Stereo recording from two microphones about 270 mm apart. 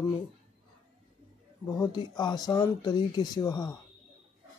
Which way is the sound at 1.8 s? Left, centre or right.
Centre.